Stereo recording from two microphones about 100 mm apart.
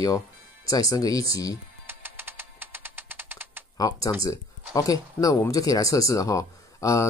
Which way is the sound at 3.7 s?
40° left (ahead or behind).